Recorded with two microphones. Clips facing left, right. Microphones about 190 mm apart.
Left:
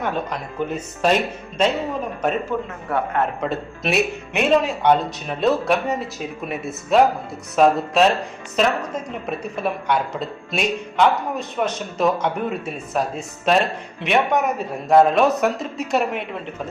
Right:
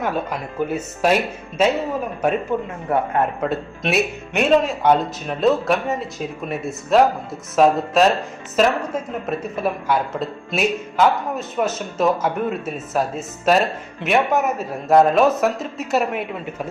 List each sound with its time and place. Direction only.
0.0 s speech: 5° right (ahead or behind)
3.5 s speech: centre (ahead or behind)